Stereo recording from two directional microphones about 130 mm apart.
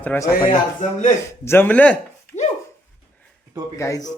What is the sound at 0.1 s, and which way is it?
Speech, 10° left (ahead or behind).